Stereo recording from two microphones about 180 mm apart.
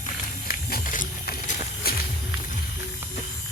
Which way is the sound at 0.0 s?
50° left (ahead or behind).